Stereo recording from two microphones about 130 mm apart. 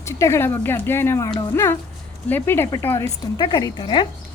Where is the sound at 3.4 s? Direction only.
30° left (ahead or behind).